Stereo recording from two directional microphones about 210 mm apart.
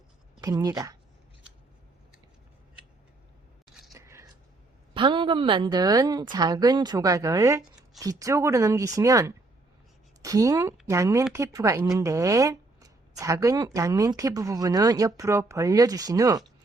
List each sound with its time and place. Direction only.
0.4 s speech: 20° right (ahead or behind)
3.9 s a sound: 15° right (ahead or behind)
4.9 s a woman's voice: 25° right (ahead or behind)